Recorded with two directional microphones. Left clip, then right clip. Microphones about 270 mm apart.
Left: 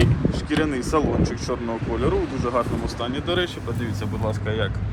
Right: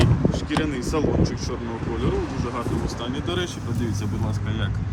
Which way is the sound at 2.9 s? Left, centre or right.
Centre.